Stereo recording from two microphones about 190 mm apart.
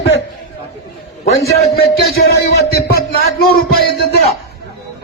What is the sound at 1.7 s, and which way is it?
Speech, 55° left (ahead or behind).